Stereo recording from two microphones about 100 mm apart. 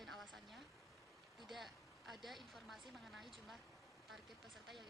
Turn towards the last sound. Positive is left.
turn(degrees=0)  # may be behind; listen again after turning